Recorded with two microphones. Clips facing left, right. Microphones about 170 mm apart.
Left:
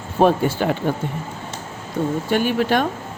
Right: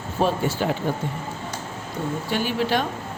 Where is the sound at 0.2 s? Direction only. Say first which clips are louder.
Left 6 dB; 60° left (ahead or behind).